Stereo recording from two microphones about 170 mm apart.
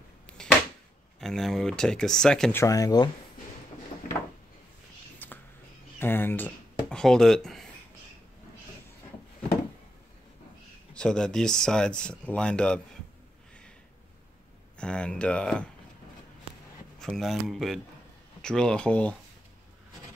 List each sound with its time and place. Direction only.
0.3 s a sound: 5° left (ahead or behind)
1.2 s speech: centre (ahead or behind)
2.6 s speech: 20° left (ahead or behind)
5.2 s whispering: 10° left (ahead or behind)
5.9 s speech: 10° left (ahead or behind)
11.0 s speech: 5° left (ahead or behind)
14.8 s speech: 5° left (ahead or behind)
17.2 s speech: centre (ahead or behind)